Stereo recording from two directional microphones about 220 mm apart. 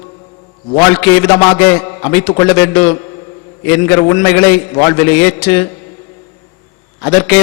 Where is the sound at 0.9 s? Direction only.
10° left (ahead or behind).